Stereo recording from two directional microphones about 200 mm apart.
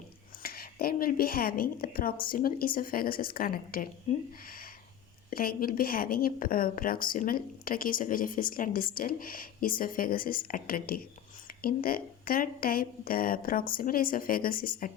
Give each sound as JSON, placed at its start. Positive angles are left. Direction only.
{"t": 0.4, "sound": "a woman's voice", "side_deg": 50}
{"t": 4.1, "sound": "speech", "side_deg": 35}
{"t": 5.3, "sound": "a woman's voice", "side_deg": 45}